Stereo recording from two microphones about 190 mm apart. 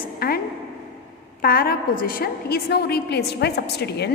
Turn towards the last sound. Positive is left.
turn(degrees=60)  # may be behind; listen again after turning